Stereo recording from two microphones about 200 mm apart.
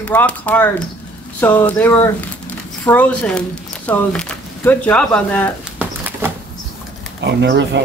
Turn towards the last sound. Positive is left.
turn(degrees=-60)  # may be behind; listen again after turning